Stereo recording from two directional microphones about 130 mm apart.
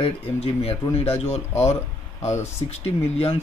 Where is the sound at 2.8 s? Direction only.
50° left (ahead or behind).